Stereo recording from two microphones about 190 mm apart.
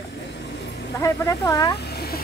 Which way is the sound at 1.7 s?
55° left (ahead or behind).